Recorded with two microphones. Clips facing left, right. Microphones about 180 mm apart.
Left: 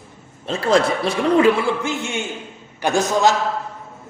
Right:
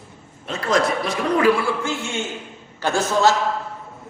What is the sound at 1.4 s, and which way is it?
A man's voice, 20° left (ahead or behind).